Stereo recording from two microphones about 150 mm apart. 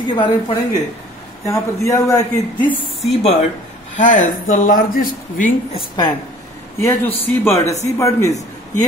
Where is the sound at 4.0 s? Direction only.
55° left (ahead or behind).